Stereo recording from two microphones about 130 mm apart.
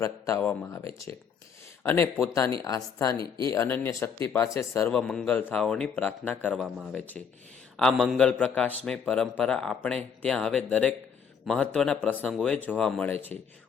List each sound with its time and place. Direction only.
0.0 s a man's voice: 25° left (ahead or behind)
3.2 s speech: 40° right (ahead or behind)
3.5 s a man's voice: 20° left (ahead or behind)
4.9 s a man's voice: 10° left (ahead or behind)
6.6 s speech: centre (ahead or behind)
6.9 s a man's voice: 10° left (ahead or behind)
7.8 s a man's voice: centre (ahead or behind)
13.1 s speech: 50° right (ahead or behind)